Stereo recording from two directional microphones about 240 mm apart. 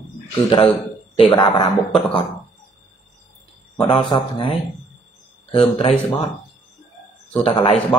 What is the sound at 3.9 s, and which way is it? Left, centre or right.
Speech, centre.